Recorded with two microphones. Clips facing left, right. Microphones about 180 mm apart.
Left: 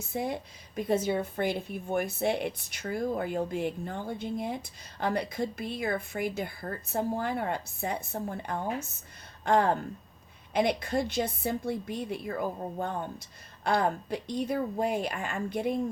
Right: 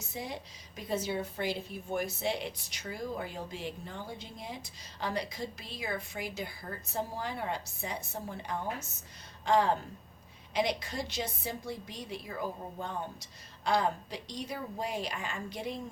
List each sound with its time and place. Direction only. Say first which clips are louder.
0.1 s a woman's voice: left 8 dB; 55° left (ahead or behind)